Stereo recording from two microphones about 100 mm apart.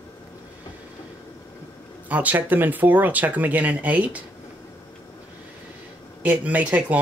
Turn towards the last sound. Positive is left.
turn(degrees=-15)  # may be behind; listen again after turning